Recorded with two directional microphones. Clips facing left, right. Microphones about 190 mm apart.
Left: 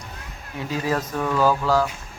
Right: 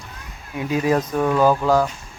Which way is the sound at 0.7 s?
15° right (ahead or behind).